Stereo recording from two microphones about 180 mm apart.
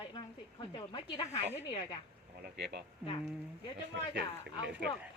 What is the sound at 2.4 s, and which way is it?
Speech, 70° right (ahead or behind).